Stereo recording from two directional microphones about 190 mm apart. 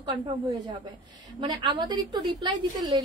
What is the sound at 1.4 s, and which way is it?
A woman's voice, 25° right (ahead or behind).